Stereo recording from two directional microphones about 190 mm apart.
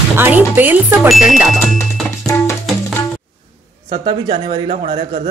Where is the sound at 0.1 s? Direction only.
10° right (ahead or behind).